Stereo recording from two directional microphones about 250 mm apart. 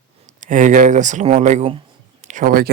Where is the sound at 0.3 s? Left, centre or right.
Right.